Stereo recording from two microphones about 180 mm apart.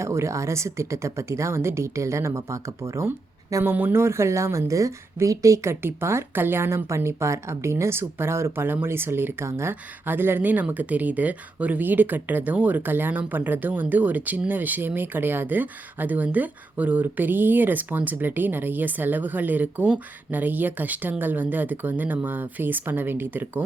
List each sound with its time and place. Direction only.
0.0 s speech: 15° right (ahead or behind)